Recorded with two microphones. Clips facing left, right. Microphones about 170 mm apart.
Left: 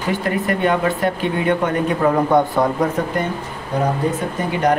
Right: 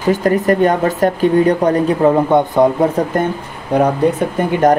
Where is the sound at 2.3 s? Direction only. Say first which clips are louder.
Right 2 dB; 25° right (ahead or behind).